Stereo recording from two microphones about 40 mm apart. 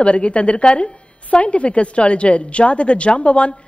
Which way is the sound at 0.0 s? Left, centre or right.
Left.